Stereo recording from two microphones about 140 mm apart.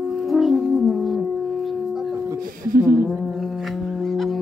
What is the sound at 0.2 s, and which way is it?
French horn, centre (ahead or behind).